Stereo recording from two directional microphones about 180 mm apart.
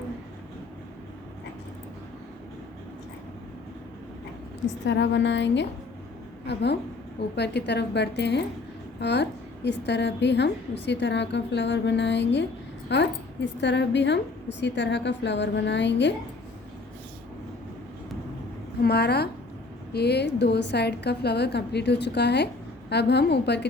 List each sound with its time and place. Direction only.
4.9 s a woman's voice: 85° left
18.8 s a woman's voice: 65° left (ahead or behind)